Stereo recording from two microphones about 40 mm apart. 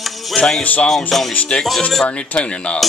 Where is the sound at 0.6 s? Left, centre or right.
Left.